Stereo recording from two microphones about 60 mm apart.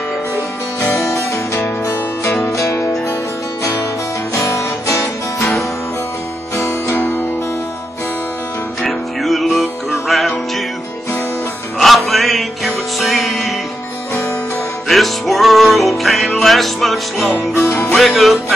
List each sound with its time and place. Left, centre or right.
0.9 s music: left
4.4 s music: left
5.4 s music: centre
6.5 s music: left
8.8 s music: centre
11.8 s music: centre
14.9 s music: centre
17.6 s music: left
17.9 s music: centre